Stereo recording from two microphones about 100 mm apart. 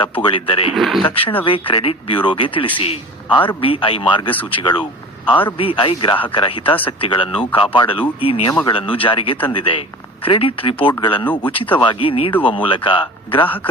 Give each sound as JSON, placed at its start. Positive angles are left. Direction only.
{"t": 0.0, "sound": "speech", "side_deg": 55}
{"t": 0.7, "sound": "speech", "side_deg": 0}
{"t": 1.1, "sound": "speech", "side_deg": 65}
{"t": 5.5, "sound": "speech", "side_deg": 60}
{"t": 10.2, "sound": "speech", "side_deg": 65}